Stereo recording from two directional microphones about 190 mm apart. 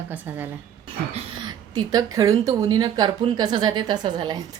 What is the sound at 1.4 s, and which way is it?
Speech, 20° right (ahead or behind).